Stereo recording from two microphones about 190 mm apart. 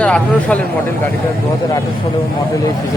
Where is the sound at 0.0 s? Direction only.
5° left (ahead or behind).